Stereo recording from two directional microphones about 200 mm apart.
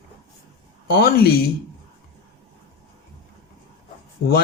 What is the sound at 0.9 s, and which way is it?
Speech, 50° left (ahead or behind).